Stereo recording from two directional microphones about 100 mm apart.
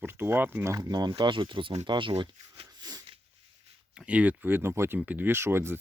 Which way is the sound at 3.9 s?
10° right (ahead or behind).